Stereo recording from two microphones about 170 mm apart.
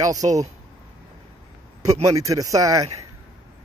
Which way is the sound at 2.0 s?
20° right (ahead or behind).